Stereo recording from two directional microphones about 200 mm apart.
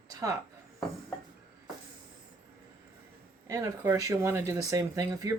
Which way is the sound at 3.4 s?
15° right (ahead or behind).